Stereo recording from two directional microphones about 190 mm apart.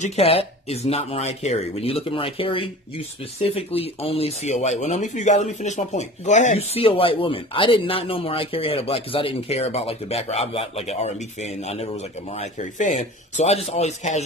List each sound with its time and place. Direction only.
0.0 s speech: 35° left (ahead or behind)